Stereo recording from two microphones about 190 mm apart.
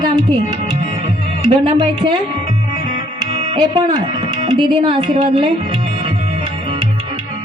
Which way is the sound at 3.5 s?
20° right (ahead or behind).